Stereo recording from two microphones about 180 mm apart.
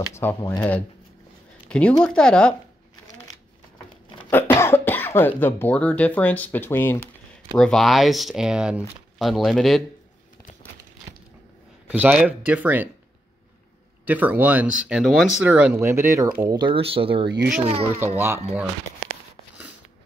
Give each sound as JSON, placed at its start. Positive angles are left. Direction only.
{"t": 0.1, "sound": "speech", "side_deg": 15}
{"t": 4.3, "sound": "speech", "side_deg": 10}
{"t": 11.9, "sound": "speech", "side_deg": -10}
{"t": 14.0, "sound": "speech", "side_deg": -10}
{"t": 18.0, "sound": "speech", "side_deg": -10}